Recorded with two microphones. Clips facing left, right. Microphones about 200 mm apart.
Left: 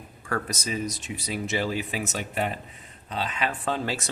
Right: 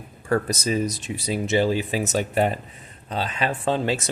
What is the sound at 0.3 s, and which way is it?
Speech, 30° right (ahead or behind).